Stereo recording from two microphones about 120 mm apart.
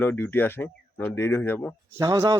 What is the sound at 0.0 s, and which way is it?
Speech, 15° left (ahead or behind).